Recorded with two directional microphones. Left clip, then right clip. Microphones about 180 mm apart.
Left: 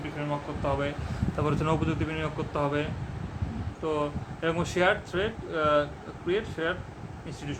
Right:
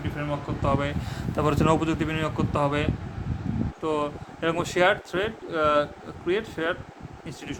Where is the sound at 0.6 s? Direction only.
20° right (ahead or behind).